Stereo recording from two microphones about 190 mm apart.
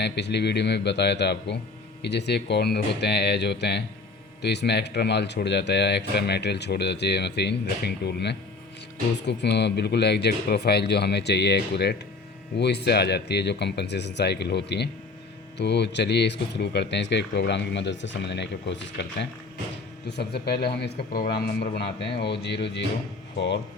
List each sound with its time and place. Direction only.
0.0 s speech: 60° left (ahead or behind)